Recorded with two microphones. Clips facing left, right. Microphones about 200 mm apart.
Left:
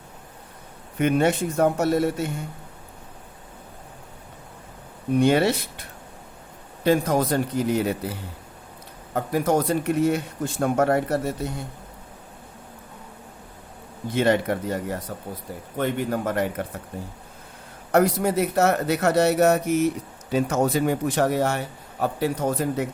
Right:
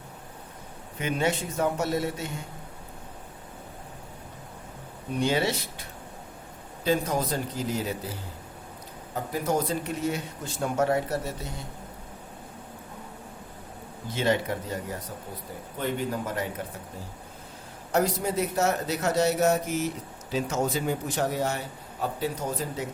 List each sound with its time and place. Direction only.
0.9 s speech: 55° left (ahead or behind)
5.2 s speech: 55° left (ahead or behind)
14.1 s speech: 60° left (ahead or behind)
17.9 s speech: 60° left (ahead or behind)